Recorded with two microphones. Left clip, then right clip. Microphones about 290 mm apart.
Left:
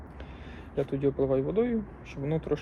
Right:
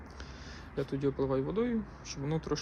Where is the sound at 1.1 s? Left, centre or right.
Centre.